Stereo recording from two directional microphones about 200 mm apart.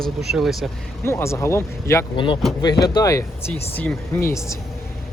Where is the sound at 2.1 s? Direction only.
25° left (ahead or behind).